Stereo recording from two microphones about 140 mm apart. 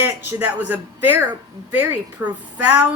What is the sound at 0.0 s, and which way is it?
Speech, 15° right (ahead or behind).